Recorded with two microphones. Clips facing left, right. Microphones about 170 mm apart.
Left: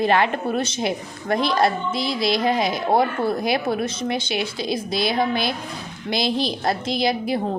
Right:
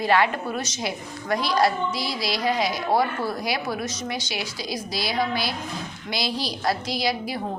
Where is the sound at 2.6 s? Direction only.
50° left (ahead or behind).